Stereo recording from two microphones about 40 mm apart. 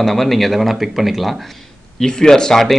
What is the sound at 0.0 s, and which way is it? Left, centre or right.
Speech, centre.